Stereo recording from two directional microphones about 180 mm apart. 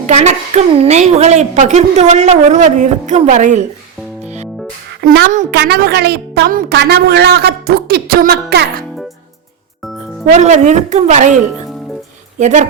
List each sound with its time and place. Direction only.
0.1 s a woman's voice: 35° right (ahead or behind)
4.9 s a child's voice: 75° right (ahead or behind)
10.2 s a woman's voice: 40° right (ahead or behind)
12.4 s a woman's voice: 40° right (ahead or behind)